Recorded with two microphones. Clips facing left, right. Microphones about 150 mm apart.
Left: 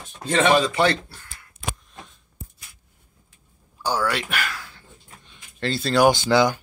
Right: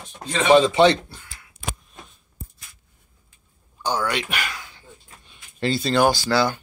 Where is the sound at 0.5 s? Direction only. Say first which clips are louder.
Right 5 dB; 25° right (ahead or behind).